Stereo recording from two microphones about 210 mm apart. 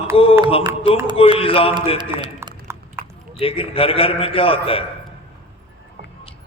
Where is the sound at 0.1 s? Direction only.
25° left (ahead or behind).